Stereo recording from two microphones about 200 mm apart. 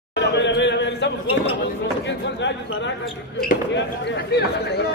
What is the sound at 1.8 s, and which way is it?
Speech, 65° left (ahead or behind).